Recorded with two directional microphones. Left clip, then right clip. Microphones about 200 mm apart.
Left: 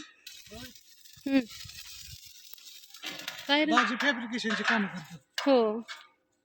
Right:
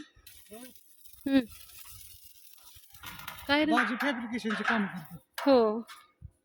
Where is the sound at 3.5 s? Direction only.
Centre (ahead or behind).